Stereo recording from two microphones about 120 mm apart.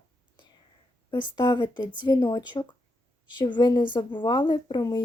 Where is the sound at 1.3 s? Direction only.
35° left (ahead or behind).